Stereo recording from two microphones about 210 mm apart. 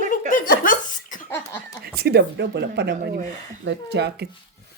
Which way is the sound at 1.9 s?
50° right (ahead or behind).